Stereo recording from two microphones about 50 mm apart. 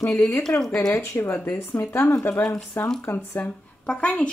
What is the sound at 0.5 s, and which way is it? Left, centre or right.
Speech, left.